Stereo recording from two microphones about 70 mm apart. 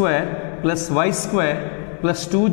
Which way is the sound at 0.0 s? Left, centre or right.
Centre.